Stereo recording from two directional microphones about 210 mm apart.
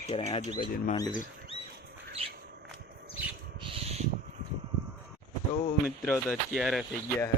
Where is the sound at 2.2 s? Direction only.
25° right (ahead or behind).